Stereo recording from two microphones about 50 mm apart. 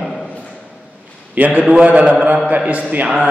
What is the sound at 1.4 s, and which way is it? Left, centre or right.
A man's voice, right.